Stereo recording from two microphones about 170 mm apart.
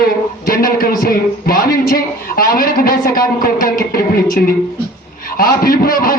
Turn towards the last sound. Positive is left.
turn(degrees=60)  # may be behind; listen again after turning